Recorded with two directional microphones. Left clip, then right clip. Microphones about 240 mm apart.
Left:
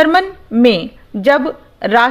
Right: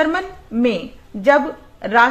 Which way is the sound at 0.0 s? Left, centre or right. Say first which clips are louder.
Left 8 dB; left.